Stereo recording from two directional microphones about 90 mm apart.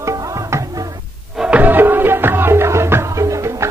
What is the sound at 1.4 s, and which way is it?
Music, 15° right (ahead or behind).